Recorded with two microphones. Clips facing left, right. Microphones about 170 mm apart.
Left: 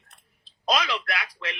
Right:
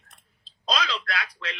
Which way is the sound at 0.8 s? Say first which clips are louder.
Left 1 dB; 25° left (ahead or behind).